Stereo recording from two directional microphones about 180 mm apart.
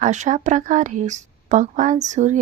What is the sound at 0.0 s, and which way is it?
A woman's voice, 40° right (ahead or behind).